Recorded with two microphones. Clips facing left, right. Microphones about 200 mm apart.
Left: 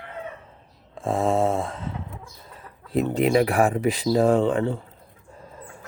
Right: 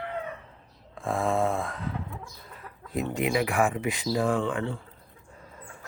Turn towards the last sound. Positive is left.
turn(degrees=40)  # may be behind; listen again after turning